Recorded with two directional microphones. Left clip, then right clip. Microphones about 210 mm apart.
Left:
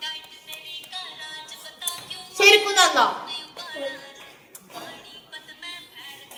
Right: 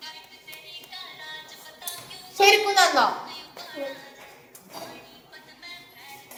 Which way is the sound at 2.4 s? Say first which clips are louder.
Left 2 dB; 5° left (ahead or behind).